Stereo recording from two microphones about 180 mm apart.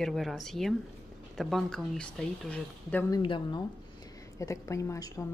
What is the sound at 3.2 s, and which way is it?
A woman's voice, 25° left (ahead or behind).